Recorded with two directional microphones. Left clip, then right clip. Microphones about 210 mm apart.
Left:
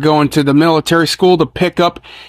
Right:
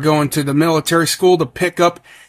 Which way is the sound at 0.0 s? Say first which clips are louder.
Left 4 dB; 30° left (ahead or behind).